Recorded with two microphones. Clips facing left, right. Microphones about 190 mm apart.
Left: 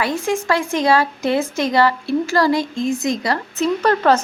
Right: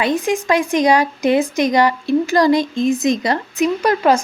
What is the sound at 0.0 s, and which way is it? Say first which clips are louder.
Speech: right 3 dB; 20° right (ahead or behind).